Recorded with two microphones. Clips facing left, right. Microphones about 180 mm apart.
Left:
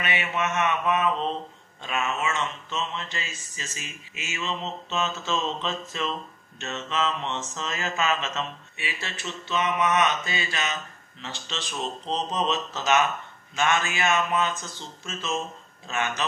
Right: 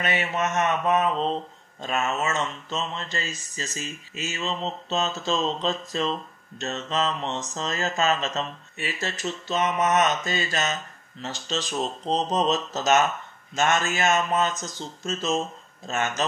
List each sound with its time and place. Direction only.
0.0 s mantra: 40° right (ahead or behind)
13.6 s speech: 45° right (ahead or behind)